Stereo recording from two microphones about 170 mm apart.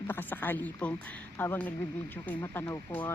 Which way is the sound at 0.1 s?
10° left (ahead or behind).